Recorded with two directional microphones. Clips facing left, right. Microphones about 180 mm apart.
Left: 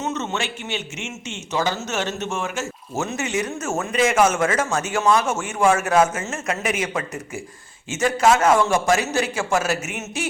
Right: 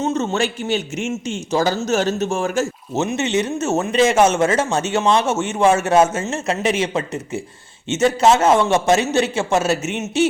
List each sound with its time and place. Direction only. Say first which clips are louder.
0.0 s a man's voice: right 6 dB; 30° right (ahead or behind)
2.9 s a man's voice: right 5 dB; 20° right (ahead or behind)